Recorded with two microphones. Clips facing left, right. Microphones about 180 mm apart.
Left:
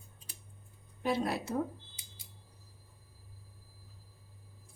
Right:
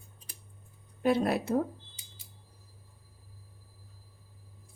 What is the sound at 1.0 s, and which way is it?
Speech, 60° right (ahead or behind).